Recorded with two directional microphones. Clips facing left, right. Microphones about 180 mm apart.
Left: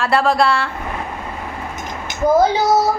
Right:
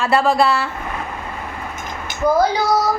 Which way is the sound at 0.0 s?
Centre (ahead or behind).